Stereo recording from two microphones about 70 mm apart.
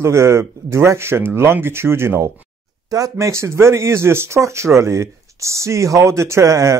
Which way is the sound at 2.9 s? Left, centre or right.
Right.